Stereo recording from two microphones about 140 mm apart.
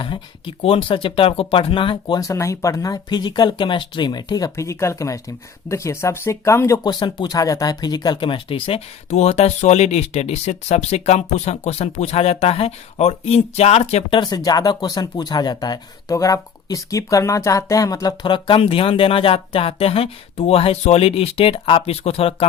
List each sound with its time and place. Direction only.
0.0 s speech: 35° left (ahead or behind); by 6.9 s 20° left (ahead or behind)
7.0 s speech: 30° left (ahead or behind); by 14.2 s 50° left (ahead or behind)
14.2 s speech: 30° left (ahead or behind)